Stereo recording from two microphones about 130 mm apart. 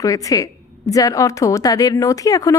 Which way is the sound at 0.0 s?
25° left (ahead or behind).